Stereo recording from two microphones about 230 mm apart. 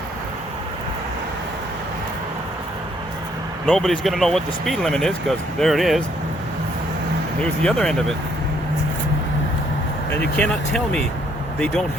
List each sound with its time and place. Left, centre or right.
3.7 s speech: centre
7.6 s speech: centre
10.1 s speech: centre